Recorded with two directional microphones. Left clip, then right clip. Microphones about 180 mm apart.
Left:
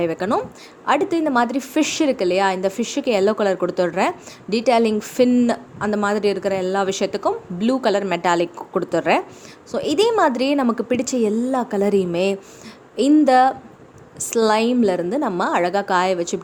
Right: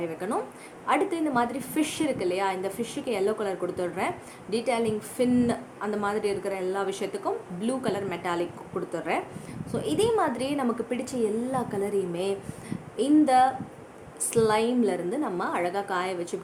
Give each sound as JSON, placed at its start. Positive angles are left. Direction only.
{"t": 0.0, "sound": "a woman's voice", "side_deg": 50}